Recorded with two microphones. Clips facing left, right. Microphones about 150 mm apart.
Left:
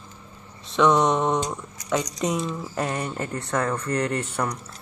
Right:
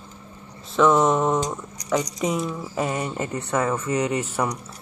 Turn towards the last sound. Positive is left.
turn(degrees=-5)  # may be behind; listen again after turning